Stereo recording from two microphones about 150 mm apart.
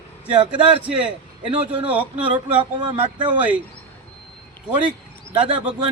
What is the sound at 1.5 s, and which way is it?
Speech, 35° right (ahead or behind).